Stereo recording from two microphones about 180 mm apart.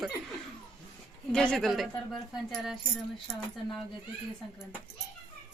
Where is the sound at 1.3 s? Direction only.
5° left (ahead or behind).